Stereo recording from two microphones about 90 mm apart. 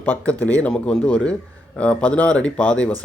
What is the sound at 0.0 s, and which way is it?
Speech, 20° left (ahead or behind).